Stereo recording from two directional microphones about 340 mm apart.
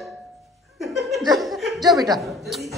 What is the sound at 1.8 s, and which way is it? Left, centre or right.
Speech, centre.